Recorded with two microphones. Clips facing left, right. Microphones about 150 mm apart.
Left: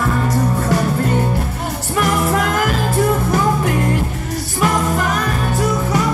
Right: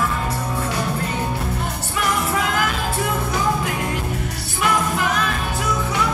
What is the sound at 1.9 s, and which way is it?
Music, 55° left (ahead or behind).